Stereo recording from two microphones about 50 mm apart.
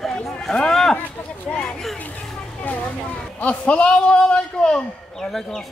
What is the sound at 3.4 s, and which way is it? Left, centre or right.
A man's voice, left.